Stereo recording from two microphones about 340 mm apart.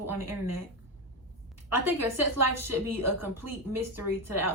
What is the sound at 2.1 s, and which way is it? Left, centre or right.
Speech, right.